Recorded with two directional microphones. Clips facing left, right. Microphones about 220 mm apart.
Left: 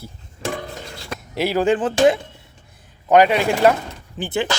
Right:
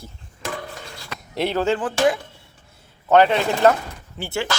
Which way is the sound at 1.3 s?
5° left (ahead or behind).